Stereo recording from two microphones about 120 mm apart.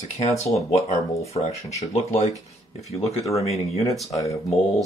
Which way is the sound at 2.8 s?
60° left (ahead or behind).